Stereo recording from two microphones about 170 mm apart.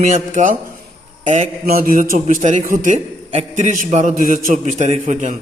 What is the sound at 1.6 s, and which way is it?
Speech, 55° right (ahead or behind).